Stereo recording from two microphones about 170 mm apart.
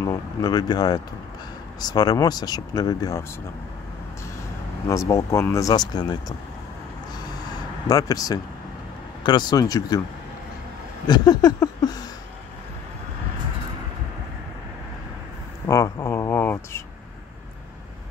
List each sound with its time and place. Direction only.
0.0 s speech: 20° left (ahead or behind)
4.8 s speech: 20° left (ahead or behind)
7.9 s speech: 20° left (ahead or behind)
11.1 s speech: 25° left (ahead or behind)
15.6 s speech: 20° left (ahead or behind)